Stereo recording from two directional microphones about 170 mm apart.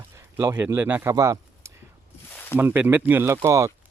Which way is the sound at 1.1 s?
20° right (ahead or behind).